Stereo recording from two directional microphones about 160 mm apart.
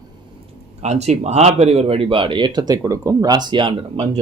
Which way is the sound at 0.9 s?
45° right (ahead or behind).